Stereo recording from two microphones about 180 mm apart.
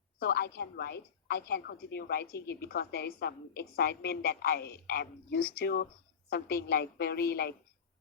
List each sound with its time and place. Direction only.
0.2 s a woman's voice: 60° left (ahead or behind)